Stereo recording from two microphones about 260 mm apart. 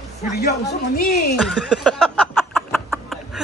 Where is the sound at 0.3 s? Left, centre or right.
Left.